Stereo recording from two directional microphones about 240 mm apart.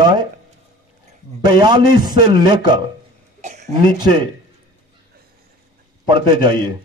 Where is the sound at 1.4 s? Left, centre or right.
Centre.